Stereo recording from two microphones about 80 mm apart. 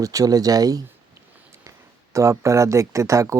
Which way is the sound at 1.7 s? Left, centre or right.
Right.